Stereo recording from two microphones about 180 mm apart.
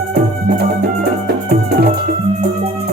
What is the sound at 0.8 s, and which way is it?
Music, 60° right (ahead or behind).